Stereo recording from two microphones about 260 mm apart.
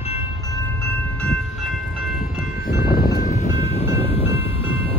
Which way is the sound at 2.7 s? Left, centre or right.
Left.